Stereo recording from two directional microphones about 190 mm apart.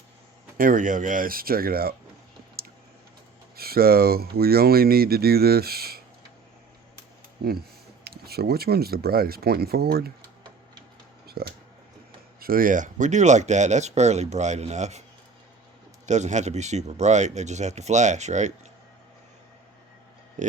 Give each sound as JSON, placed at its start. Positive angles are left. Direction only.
{"t": 0.5, "sound": "speech", "side_deg": -45}
{"t": 3.5, "sound": "speech", "side_deg": -55}
{"t": 7.4, "sound": "speech", "side_deg": -55}
{"t": 11.3, "sound": "speech", "side_deg": -55}
{"t": 16.0, "sound": "speech", "side_deg": -40}
{"t": 20.4, "sound": "speech", "side_deg": -40}